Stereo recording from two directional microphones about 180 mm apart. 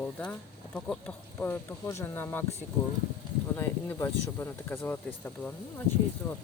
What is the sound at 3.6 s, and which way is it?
Speech, 15° left (ahead or behind).